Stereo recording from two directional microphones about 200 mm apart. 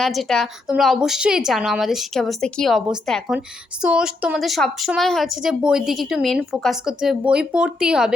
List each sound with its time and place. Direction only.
0.0 s a woman's voice: centre (ahead or behind)